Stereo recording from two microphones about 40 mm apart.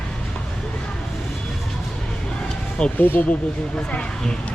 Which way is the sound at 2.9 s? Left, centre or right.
Left.